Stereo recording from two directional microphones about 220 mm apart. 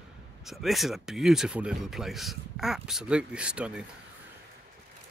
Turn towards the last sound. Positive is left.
turn(degrees=-5)  # may be behind; listen again after turning